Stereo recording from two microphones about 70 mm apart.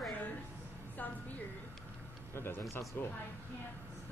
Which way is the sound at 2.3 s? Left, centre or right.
Left.